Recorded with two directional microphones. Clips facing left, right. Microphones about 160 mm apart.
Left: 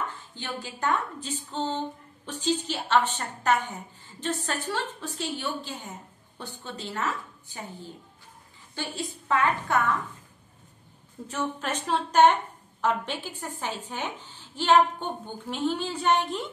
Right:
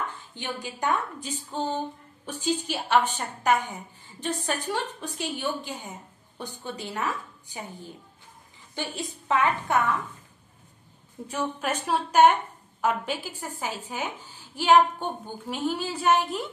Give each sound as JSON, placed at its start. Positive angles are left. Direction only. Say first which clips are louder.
{"t": 0.3, "sound": "a woman's voice", "louder": "right 2 dB", "side_deg": -15}
{"t": 11.2, "sound": "a woman's voice", "louder": "right 2 dB", "side_deg": -10}